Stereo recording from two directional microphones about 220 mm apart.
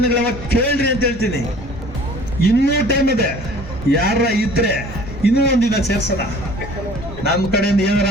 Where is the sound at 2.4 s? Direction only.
45° left (ahead or behind).